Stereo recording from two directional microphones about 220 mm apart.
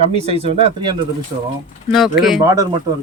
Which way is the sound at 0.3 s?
30° right (ahead or behind).